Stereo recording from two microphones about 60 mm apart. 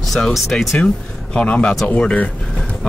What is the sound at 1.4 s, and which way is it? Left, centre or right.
Speech, left.